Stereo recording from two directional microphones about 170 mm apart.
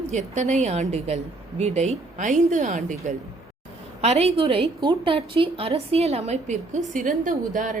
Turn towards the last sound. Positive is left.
turn(degrees=-50)  # may be behind; listen again after turning